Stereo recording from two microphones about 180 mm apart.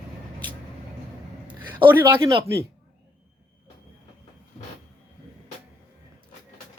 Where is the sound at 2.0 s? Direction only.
20° right (ahead or behind).